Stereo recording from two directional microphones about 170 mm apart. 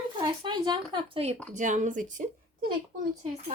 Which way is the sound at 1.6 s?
45° right (ahead or behind).